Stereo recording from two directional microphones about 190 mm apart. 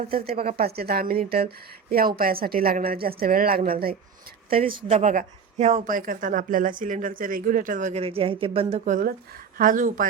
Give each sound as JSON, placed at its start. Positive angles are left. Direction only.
{"t": 0.3, "sound": "a woman's voice", "side_deg": -55}
{"t": 4.5, "sound": "a woman's voice", "side_deg": -25}